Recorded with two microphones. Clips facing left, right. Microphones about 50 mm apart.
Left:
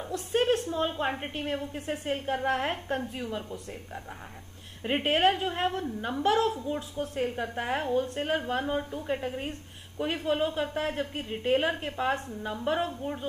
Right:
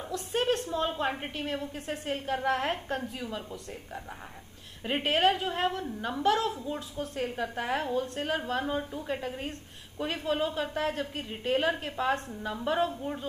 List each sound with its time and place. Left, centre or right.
0.3 s a sound: centre
0.7 s a woman's voice: centre
1.6 s a woman's voice: centre
5.0 s a woman's voice: centre